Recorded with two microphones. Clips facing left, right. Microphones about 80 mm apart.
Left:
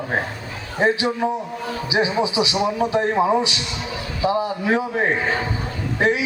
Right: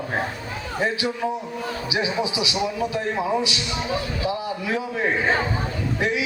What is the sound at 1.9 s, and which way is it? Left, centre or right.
A man's voice, left.